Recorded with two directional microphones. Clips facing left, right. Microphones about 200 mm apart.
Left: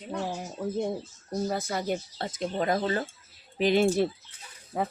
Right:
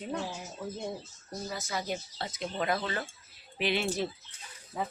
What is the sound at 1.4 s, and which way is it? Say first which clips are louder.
Speech: left 5 dB; 55° left (ahead or behind).